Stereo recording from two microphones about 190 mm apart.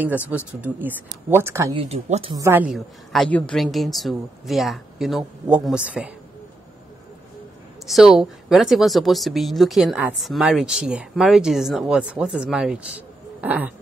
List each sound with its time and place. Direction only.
0.0 s speech: 10° right (ahead or behind)
1.7 s speech: 30° right (ahead or behind)
2.3 s speech: 10° right (ahead or behind)
7.8 s speech: centre (ahead or behind)